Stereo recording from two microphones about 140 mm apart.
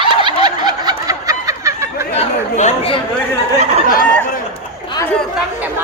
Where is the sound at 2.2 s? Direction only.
50° left (ahead or behind).